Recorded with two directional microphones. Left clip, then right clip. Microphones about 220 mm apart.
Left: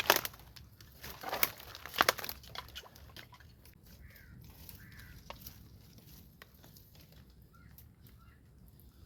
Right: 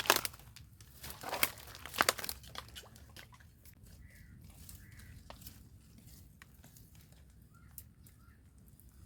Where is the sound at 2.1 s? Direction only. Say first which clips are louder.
Left 1 dB; 5° right (ahead or behind).